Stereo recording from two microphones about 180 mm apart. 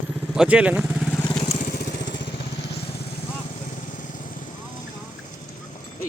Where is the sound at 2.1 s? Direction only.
75° left (ahead or behind).